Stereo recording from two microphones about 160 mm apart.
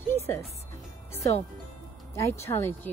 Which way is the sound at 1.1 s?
20° left (ahead or behind).